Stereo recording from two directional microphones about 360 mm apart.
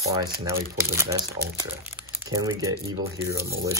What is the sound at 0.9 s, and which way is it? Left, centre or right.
Speech, centre.